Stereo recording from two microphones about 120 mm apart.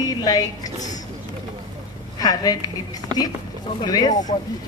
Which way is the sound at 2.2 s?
35° left (ahead or behind).